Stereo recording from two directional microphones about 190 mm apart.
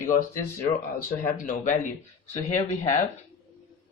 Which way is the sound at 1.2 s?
45° left (ahead or behind).